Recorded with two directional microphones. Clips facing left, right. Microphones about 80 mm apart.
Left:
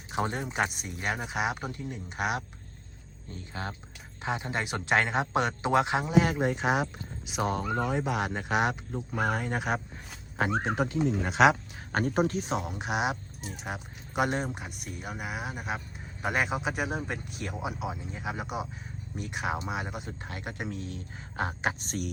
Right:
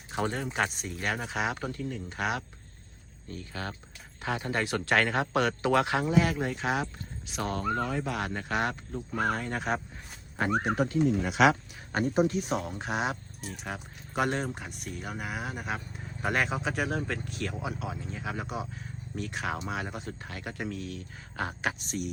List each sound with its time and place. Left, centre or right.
0.1 s speech: left
0.4 s speech: centre
10.6 s speech: left
11.9 s speech: left
12.5 s speech: left
20.2 s speech: left
21.8 s speech: left